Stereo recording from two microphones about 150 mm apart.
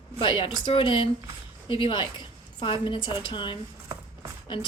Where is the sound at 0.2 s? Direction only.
35° left (ahead or behind).